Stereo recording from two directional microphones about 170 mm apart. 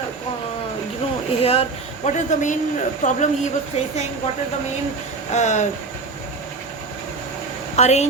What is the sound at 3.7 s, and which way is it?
Speech, 35° left (ahead or behind).